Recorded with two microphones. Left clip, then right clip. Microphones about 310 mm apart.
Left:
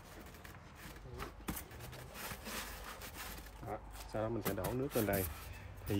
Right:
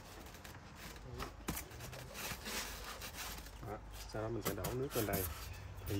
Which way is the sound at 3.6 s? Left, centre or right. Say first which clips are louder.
Left 4 dB; centre.